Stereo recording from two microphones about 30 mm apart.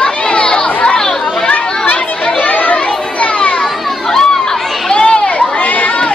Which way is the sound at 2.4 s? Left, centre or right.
Left.